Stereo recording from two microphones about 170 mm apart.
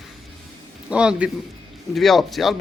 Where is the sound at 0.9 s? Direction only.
5° right (ahead or behind).